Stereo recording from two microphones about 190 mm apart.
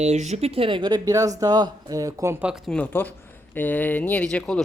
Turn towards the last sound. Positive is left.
turn(degrees=5)  # may be behind; listen again after turning